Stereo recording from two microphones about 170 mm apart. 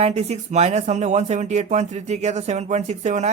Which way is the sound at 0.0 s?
40° right (ahead or behind).